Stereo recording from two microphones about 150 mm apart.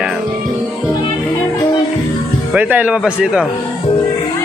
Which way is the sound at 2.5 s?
10° right (ahead or behind).